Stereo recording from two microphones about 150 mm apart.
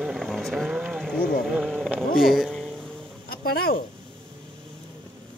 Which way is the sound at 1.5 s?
Centre (ahead or behind).